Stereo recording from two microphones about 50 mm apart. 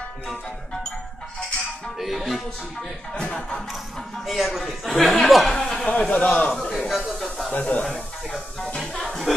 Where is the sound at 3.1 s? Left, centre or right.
Centre.